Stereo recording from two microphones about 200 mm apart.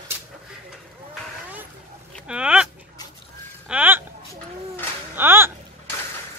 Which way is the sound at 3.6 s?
10° right (ahead or behind).